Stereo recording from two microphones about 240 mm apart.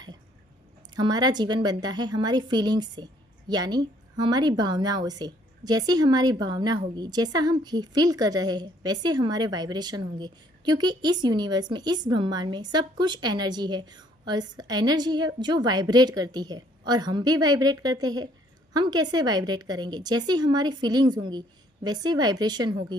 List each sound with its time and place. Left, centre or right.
0.9 s a woman's voice: centre